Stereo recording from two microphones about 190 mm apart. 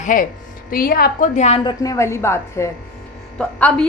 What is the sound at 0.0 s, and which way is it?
A woman's voice, 45° left (ahead or behind).